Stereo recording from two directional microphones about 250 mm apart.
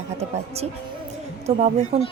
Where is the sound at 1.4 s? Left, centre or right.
Right.